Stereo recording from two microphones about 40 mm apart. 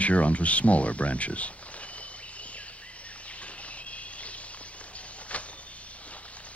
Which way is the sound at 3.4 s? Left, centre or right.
Left.